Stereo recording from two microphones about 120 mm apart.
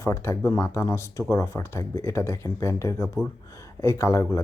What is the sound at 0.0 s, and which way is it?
Speech, 25° left (ahead or behind).